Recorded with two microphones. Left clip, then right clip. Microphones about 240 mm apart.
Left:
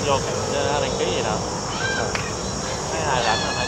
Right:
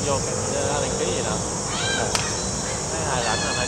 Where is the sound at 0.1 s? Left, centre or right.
Left.